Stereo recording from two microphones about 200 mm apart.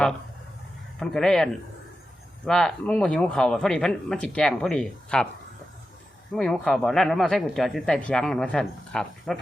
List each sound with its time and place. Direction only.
0.9 s speech: 5° left (ahead or behind)
6.3 s speech: centre (ahead or behind)